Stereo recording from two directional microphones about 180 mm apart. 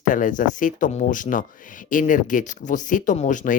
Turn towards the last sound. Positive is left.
turn(degrees=45)  # may be behind; listen again after turning